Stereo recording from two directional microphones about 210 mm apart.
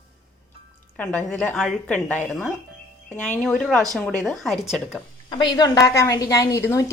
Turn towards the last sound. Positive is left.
turn(degrees=15)  # may be behind; listen again after turning